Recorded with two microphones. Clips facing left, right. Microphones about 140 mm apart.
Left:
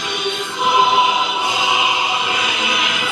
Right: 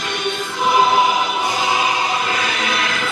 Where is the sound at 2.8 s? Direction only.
15° left (ahead or behind).